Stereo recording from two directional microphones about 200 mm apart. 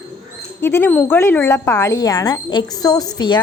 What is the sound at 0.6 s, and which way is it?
A woman's voice, 10° left (ahead or behind).